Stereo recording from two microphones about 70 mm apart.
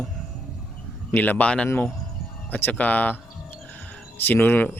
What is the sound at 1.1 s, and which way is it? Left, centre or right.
Speech, left.